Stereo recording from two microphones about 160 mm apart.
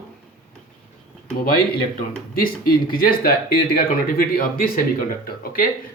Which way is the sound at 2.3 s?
65° left (ahead or behind).